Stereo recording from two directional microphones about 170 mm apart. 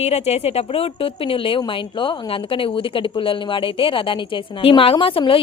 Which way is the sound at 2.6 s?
30° left (ahead or behind).